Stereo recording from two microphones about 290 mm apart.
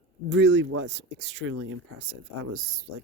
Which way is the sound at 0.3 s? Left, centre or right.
Right.